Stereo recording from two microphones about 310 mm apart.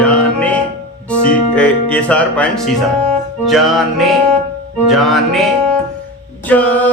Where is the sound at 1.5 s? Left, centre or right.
Centre.